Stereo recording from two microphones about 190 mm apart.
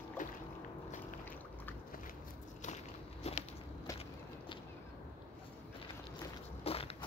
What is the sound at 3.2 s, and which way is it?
Biting, 35° left (ahead or behind).